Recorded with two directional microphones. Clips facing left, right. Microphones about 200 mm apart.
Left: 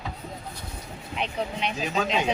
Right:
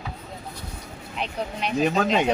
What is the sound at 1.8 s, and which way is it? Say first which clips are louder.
Speech: right 6 dB; 60° right (ahead or behind).